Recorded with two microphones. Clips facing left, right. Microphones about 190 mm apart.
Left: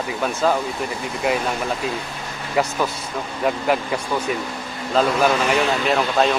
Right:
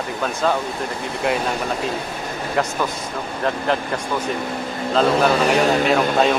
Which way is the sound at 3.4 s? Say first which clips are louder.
Left 1 dB; 10° left (ahead or behind).